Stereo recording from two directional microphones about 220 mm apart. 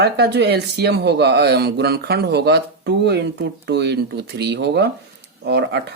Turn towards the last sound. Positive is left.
turn(degrees=-50)  # may be behind; listen again after turning